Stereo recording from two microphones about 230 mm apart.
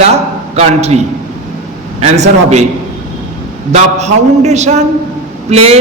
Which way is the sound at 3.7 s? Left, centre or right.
Right.